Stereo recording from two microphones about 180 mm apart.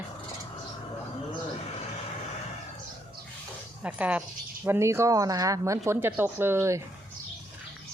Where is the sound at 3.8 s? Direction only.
5° right (ahead or behind).